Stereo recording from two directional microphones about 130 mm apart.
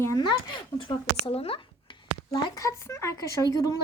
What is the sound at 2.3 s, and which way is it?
A woman's voice, 25° left (ahead or behind).